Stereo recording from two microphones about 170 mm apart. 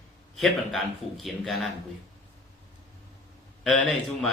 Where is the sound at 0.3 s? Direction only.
Centre (ahead or behind).